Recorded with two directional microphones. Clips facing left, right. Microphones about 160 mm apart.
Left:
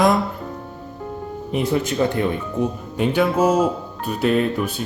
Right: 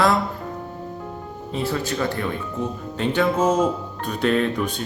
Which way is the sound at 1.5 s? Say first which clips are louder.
Left 4 dB; 20° left (ahead or behind).